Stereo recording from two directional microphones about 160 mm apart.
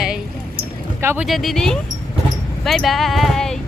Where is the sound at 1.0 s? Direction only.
15° right (ahead or behind).